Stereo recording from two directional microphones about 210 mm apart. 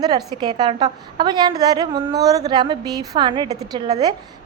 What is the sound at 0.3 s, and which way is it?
A woman's voice, 20° right (ahead or behind).